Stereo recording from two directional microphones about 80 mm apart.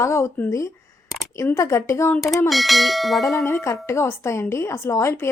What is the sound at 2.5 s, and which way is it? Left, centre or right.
Bell, centre.